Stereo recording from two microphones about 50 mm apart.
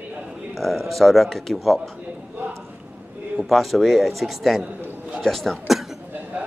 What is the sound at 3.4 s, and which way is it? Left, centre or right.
Speech, centre.